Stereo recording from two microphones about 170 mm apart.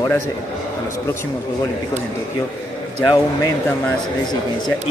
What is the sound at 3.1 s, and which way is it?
Speech, 20° left (ahead or behind).